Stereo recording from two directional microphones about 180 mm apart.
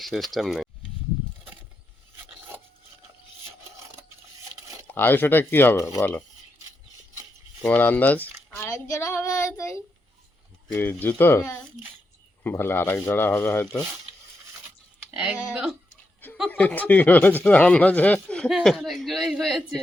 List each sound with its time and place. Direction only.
0.0 s speech: centre (ahead or behind)
4.9 s speech: 10° left (ahead or behind)
7.6 s speech: 10° left (ahead or behind)
15.1 s speech: 5° right (ahead or behind)
16.5 s speech: 10° left (ahead or behind)